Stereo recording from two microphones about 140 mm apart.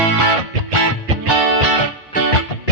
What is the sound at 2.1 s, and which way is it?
Music, 70° left (ahead or behind).